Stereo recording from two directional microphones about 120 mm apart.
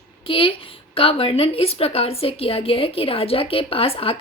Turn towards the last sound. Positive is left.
turn(degrees=50)  # may be behind; listen again after turning